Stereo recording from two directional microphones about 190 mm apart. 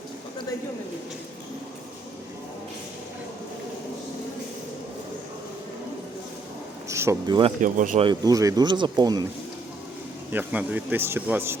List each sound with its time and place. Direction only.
6.8 s speech: 15° right (ahead or behind)
7.6 s speech: 45° right (ahead or behind)
8.0 s speech: 20° right (ahead or behind)
10.3 s speech: 5° right (ahead or behind)